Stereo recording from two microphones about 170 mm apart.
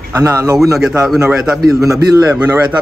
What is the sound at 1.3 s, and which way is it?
Speech, 5° right (ahead or behind).